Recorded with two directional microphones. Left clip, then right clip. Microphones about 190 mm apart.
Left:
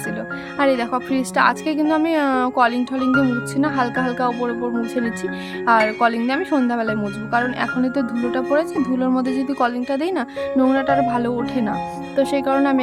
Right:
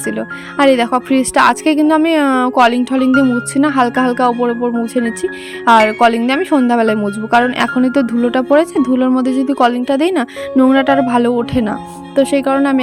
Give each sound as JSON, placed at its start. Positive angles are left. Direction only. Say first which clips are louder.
{"t": 0.5, "sound": "speech", "louder": "right 8 dB", "side_deg": -35}